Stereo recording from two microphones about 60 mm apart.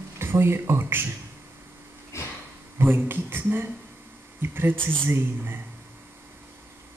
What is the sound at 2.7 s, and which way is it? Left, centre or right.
Speech, right.